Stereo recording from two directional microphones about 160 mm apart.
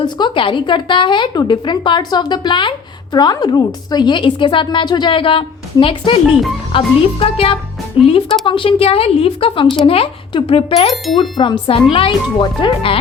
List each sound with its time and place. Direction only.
0.0 s a woman's voice: 30° left (ahead or behind)
8.0 s speech: 10° right (ahead or behind)
8.4 s a woman's voice: 35° left (ahead or behind)
10.9 s chime: centre (ahead or behind)
11.2 s a woman's voice: 30° left (ahead or behind)